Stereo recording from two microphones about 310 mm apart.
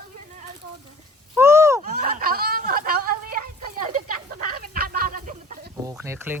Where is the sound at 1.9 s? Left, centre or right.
Right.